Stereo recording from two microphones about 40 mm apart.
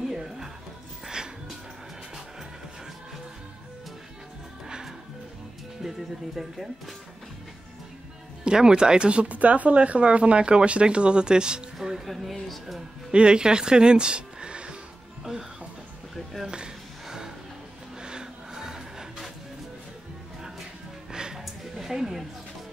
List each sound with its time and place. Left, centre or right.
0.1 s music: centre
5.8 s speech: centre
8.5 s speech: right
12.2 s speech: centre
13.1 s speech: right
16.4 s a sound: right
18.0 s printer: centre
21.1 s music: centre
21.4 s a sound: centre